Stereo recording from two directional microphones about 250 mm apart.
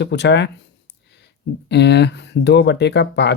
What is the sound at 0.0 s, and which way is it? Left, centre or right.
Speech, left.